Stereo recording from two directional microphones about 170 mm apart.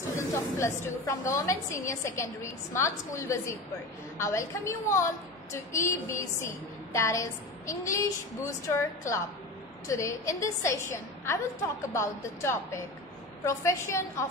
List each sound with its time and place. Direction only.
0.1 s a woman's voice: 15° left (ahead or behind)